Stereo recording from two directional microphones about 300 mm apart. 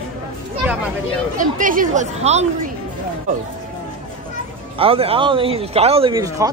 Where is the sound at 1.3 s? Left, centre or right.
Right.